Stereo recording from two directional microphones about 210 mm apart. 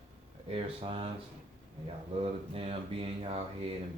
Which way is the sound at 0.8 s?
25° right (ahead or behind).